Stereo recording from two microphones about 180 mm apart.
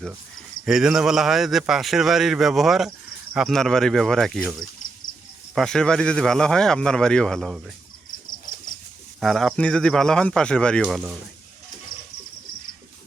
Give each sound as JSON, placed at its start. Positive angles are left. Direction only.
{"t": 0.6, "sound": "speech", "side_deg": -5}
{"t": 5.5, "sound": "speech", "side_deg": 5}
{"t": 8.5, "sound": "dog", "side_deg": 55}
{"t": 9.2, "sound": "speech", "side_deg": 0}